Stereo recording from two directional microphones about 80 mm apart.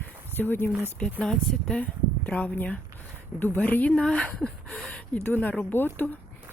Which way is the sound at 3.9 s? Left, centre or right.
Centre.